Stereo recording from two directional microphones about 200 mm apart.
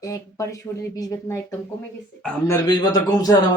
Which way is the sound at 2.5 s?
20° left (ahead or behind).